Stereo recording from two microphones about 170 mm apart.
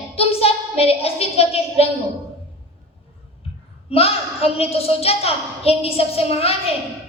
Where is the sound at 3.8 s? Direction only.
35° left (ahead or behind).